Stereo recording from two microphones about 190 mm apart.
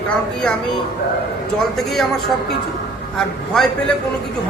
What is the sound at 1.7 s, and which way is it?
Speech, centre (ahead or behind).